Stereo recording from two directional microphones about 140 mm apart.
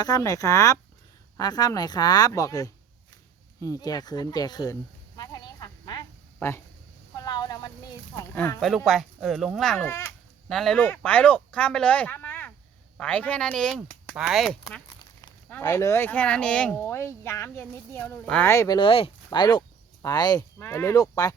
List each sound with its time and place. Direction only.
0.0 s speech: 25° left (ahead or behind)
3.6 s a sound: 25° left (ahead or behind)
7.2 s a sound: 30° left (ahead or behind)
8.3 s speech: 15° left (ahead or behind)
8.6 s speech: centre (ahead or behind)
9.8 s speech: 15° left (ahead or behind)
10.5 s speech: 5° left (ahead or behind)
15.7 s speech: 20° left (ahead or behind)
18.8 s speech: 40° left (ahead or behind)